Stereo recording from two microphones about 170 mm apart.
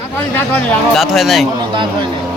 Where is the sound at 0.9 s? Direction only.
Centre (ahead or behind).